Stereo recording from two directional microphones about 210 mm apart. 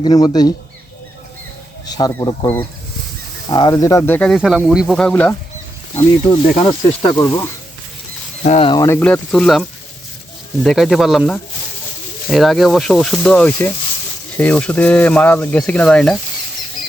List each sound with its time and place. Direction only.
0.0 s speech: 20° left (ahead or behind)
1.9 s speech: 20° left (ahead or behind)
3.5 s speech: 20° left (ahead or behind)
6.6 s speech: 20° left (ahead or behind)
8.4 s speech: 30° left (ahead or behind)
8.7 s speech: 15° left (ahead or behind)